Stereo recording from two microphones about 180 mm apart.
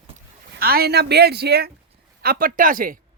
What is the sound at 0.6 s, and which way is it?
Speech, 55° right (ahead or behind).